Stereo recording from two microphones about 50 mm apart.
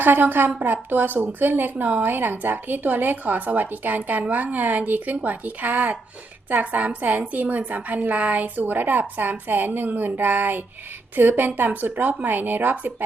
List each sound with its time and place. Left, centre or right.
0.0 s speech: right